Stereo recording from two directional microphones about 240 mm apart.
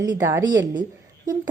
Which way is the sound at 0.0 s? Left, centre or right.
Centre.